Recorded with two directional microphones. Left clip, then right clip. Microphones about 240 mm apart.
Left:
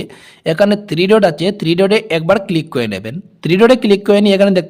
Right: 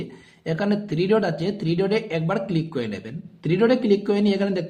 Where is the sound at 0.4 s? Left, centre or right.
Left.